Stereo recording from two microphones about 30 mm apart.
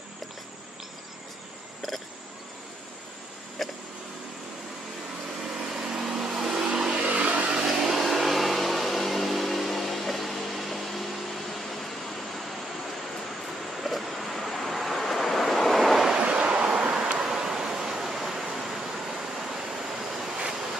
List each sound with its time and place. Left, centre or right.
3.6 s a sound: centre
5.4 s vehicle: centre
7.1 s vehicle: right
7.6 s vehicle: centre
13.7 s vehicle: centre
16.2 s vehicle: right
17.2 s a sound: centre